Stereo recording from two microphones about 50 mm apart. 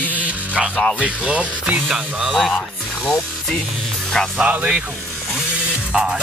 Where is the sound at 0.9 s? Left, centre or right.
Right.